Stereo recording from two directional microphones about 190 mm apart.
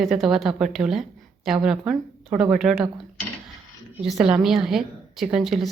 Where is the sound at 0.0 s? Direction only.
Centre (ahead or behind).